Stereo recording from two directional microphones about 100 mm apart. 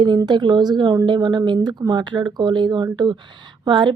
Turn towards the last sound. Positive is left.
turn(degrees=-50)  # may be behind; listen again after turning